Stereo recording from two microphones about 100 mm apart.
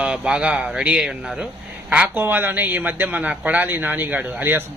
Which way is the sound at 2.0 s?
20° right (ahead or behind).